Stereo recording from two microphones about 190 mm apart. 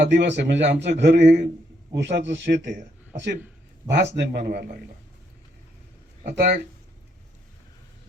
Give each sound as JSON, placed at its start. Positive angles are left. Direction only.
{"t": 0.1, "sound": "a man's voice", "side_deg": -65}
{"t": 3.8, "sound": "a man's voice", "side_deg": -65}
{"t": 6.2, "sound": "a man's voice", "side_deg": -55}